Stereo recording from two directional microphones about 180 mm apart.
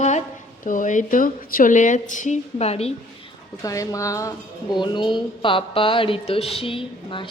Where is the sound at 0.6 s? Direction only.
45° left (ahead or behind).